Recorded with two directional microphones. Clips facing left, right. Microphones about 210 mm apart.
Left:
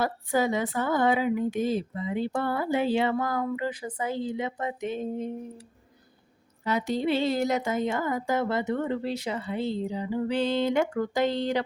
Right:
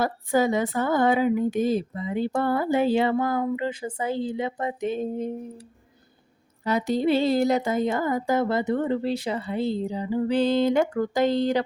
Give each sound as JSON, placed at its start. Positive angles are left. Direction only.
{"t": 0.0, "sound": "speech", "side_deg": -45}
{"t": 6.7, "sound": "speech", "side_deg": -40}